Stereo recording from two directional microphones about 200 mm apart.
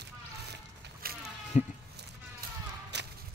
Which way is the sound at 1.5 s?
35° left (ahead or behind).